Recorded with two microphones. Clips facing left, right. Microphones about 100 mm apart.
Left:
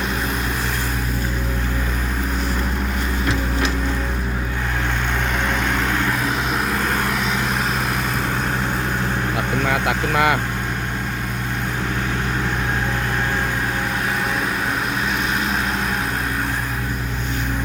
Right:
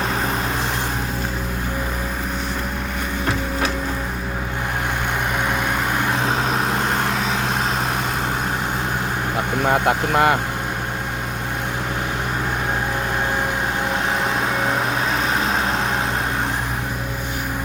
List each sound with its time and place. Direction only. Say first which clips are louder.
6.2 s vehicle: right 1 dB; 25° right (ahead or behind)
10.1 s speech: right 1 dB; 30° right (ahead or behind)